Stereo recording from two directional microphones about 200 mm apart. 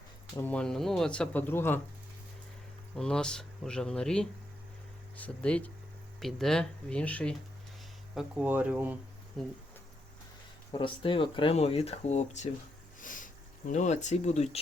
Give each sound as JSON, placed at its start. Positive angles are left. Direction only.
{"t": 0.3, "sound": "speech", "side_deg": 5}
{"t": 2.9, "sound": "speech", "side_deg": 5}
{"t": 8.1, "sound": "speech", "side_deg": -5}
{"t": 10.7, "sound": "speech", "side_deg": 25}
{"t": 13.0, "sound": "a sound", "side_deg": 40}
{"t": 13.7, "sound": "speech", "side_deg": 35}